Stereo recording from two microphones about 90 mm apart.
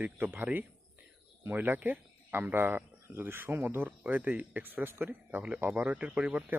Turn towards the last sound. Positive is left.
turn(degrees=-15)  # may be behind; listen again after turning